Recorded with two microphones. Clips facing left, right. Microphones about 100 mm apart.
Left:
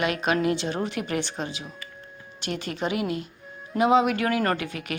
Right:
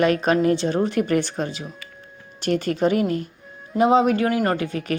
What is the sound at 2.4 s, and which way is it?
A woman's voice, 45° right (ahead or behind).